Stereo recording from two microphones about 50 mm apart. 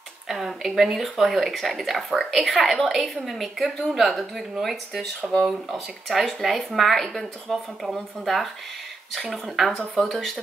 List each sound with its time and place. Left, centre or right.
0.3 s speech: centre